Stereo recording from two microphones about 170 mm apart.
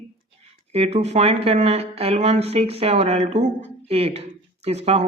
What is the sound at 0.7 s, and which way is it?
Speech, 35° right (ahead or behind).